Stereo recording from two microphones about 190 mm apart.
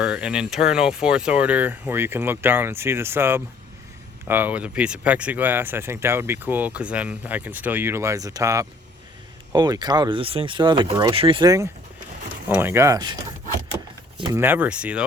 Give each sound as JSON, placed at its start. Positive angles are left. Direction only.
{"t": 0.0, "sound": "speech", "side_deg": -5}
{"t": 14.2, "sound": "speech", "side_deg": -25}
{"t": 14.4, "sound": "speech", "side_deg": -10}